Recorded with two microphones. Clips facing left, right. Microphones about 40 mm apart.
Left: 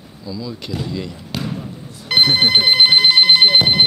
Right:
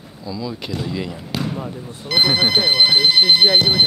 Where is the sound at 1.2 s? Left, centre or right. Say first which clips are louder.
Right 1 dB; centre.